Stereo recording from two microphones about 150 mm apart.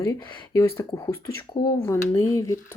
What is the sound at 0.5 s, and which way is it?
Speech, 15° left (ahead or behind).